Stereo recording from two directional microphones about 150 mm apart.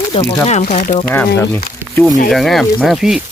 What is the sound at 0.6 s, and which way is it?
Speech, 75° left (ahead or behind).